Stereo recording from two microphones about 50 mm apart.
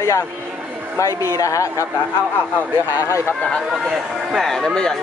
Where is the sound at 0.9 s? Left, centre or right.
Left.